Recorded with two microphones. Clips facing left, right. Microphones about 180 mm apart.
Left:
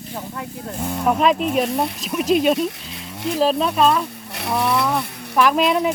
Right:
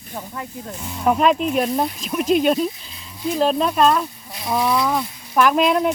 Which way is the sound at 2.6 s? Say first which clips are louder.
Even; 75° left (ahead or behind).